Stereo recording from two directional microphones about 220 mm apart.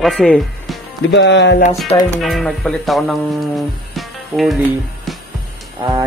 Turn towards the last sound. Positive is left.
turn(degrees=-15)  # may be behind; listen again after turning